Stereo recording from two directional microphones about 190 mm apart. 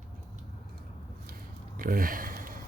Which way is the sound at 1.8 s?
45° right (ahead or behind).